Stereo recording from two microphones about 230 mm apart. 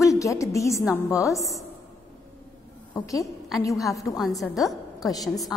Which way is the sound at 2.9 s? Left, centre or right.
Centre.